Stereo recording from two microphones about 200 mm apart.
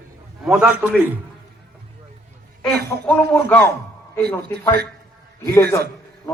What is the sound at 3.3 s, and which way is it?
Speech, 10° left (ahead or behind).